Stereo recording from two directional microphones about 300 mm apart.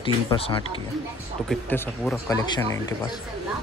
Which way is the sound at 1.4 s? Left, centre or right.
Centre.